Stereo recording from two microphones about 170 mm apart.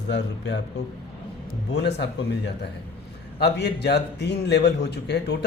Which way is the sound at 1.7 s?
85° left.